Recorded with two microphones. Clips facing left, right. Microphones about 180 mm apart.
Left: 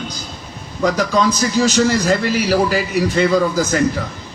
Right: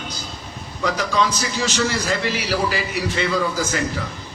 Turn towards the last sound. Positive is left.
turn(degrees=45)  # may be behind; listen again after turning